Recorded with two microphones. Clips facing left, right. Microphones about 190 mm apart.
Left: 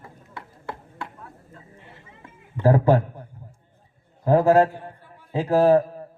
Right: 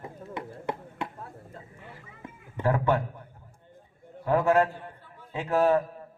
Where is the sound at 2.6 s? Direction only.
35° left (ahead or behind).